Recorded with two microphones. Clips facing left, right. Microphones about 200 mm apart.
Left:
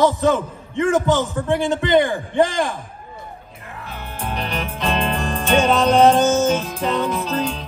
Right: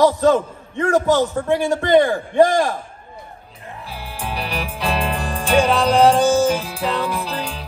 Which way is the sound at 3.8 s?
10° right (ahead or behind).